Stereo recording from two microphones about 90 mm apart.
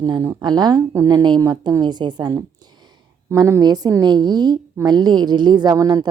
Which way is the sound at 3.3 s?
40° right (ahead or behind).